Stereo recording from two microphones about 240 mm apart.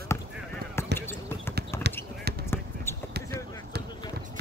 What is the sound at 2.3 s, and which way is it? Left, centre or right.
Basketball bounce, right.